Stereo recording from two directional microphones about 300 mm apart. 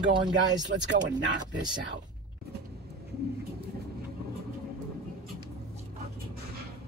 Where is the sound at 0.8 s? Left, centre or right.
Right.